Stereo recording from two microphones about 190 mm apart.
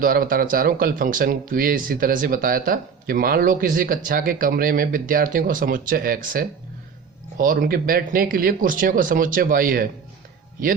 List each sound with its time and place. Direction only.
0.0 s speech: 50° right (ahead or behind)